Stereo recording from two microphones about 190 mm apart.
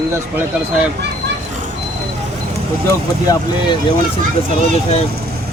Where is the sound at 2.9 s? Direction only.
20° left (ahead or behind).